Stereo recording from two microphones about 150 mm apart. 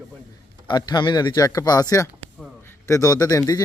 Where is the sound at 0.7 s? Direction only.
30° left (ahead or behind).